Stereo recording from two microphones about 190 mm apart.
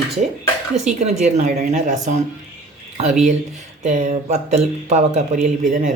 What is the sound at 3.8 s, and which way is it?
Speech, 40° right (ahead or behind).